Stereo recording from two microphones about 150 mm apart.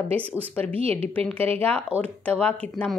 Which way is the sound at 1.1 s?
10° left (ahead or behind).